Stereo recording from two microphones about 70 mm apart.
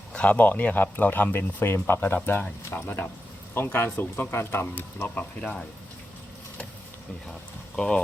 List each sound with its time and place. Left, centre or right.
0.1 s speech: centre; by 4.6 s left
4.6 s speech: left
7.8 s speech: centre